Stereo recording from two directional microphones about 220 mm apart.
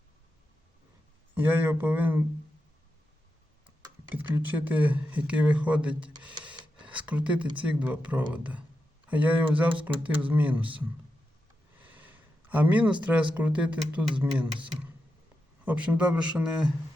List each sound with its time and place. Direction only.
1.4 s speech: 10° right (ahead or behind)
4.3 s speech: 10° right (ahead or behind)
6.2 s a sound: 5° right (ahead or behind)
6.8 s speech: 5° right (ahead or behind)
11.8 s a sound: 5° right (ahead or behind)
13.3 s speech: 5° right (ahead or behind)